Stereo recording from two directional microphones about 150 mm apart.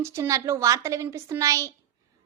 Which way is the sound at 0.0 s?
20° right (ahead or behind).